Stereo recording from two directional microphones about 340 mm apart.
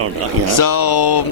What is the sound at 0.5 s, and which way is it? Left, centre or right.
Speech, left.